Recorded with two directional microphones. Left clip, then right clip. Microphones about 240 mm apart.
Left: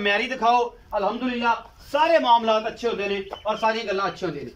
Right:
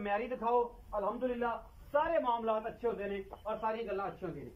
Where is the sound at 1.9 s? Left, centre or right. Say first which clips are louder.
Left 13 dB; centre.